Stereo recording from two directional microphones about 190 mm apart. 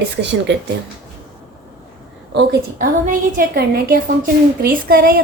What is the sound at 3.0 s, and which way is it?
A woman's voice, 50° right (ahead or behind).